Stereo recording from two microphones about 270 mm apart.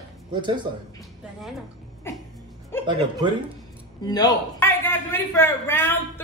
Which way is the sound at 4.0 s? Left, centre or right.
Centre.